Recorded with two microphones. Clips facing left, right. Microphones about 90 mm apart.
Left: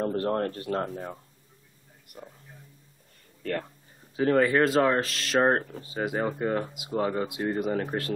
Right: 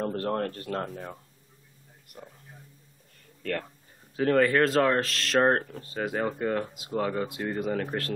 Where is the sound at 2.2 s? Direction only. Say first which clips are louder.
Left 1 dB; 5° left (ahead or behind).